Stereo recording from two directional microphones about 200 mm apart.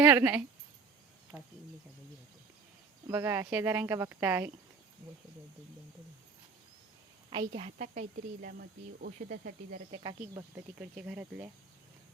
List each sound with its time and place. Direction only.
0.0 s speech: 10° right (ahead or behind)
3.1 s speech: 10° right (ahead or behind)
7.3 s speech: 30° right (ahead or behind); by 9.8 s 45° right (ahead or behind)
9.9 s speech: 20° right (ahead or behind)
10.8 s speech: 5° right (ahead or behind)